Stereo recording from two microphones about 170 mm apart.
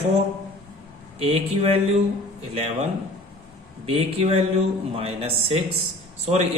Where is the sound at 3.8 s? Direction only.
35° right (ahead or behind).